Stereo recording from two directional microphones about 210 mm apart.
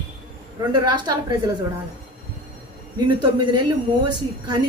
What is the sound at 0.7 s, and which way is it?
Speech, 20° right (ahead or behind).